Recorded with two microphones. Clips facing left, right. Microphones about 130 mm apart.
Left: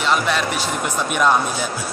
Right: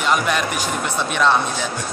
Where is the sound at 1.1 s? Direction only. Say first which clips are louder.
Even; 10° left (ahead or behind).